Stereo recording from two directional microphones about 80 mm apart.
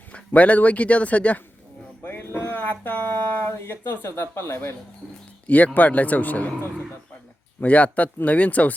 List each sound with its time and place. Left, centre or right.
0.3 s speech: centre
2.0 s a sound: left
3.5 s speech: left
5.5 s speech: centre
7.6 s speech: centre